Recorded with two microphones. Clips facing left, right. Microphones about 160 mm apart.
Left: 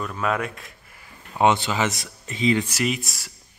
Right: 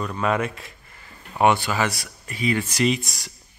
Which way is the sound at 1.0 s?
20° left (ahead or behind).